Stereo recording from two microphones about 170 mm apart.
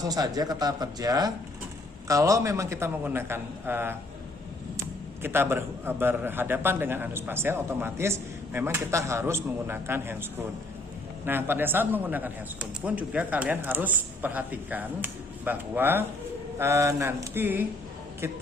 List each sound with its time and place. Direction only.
0.0 s a man's voice: 20° right (ahead or behind)
11.3 s a man's voice: 10° right (ahead or behind)